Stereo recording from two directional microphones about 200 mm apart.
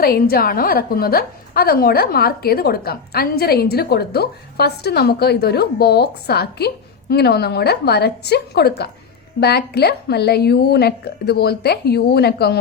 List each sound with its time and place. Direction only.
0.0 s a woman's voice: 50° left (ahead or behind)